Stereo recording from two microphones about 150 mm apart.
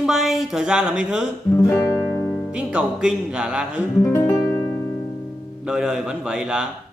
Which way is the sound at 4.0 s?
15° left (ahead or behind).